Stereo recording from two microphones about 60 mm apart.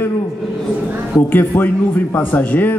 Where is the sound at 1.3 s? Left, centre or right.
Left.